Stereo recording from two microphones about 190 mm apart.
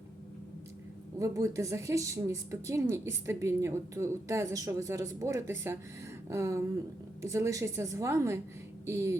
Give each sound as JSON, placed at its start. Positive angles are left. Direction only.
{"t": 1.2, "sound": "a woman's voice", "side_deg": -15}